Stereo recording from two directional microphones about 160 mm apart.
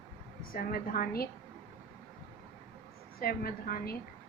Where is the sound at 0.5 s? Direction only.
65° left (ahead or behind).